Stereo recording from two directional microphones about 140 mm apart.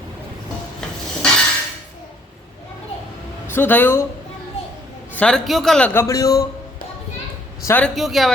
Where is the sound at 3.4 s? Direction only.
15° left (ahead or behind).